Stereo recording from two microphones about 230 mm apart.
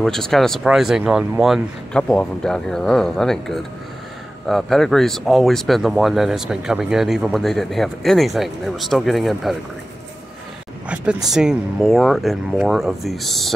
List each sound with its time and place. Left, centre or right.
0.0 s speech: centre
11.2 s speech: centre